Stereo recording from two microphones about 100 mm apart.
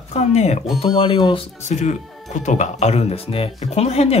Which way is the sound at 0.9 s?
50° left (ahead or behind).